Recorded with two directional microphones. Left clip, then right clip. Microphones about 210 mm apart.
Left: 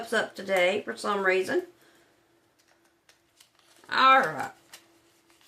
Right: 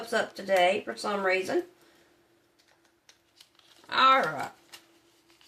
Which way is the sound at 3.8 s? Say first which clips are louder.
Left 2 dB; 15° left (ahead or behind).